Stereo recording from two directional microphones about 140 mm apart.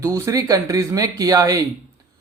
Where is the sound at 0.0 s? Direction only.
20° right (ahead or behind).